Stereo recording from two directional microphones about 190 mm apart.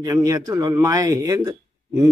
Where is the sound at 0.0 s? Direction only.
20° right (ahead or behind).